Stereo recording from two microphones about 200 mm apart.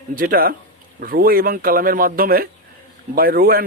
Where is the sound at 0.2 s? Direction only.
45° right (ahead or behind).